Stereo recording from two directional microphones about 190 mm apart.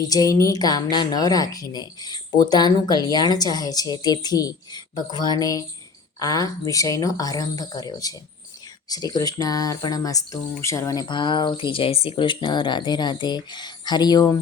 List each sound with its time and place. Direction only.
0.1 s a woman's voice: 20° left (ahead or behind)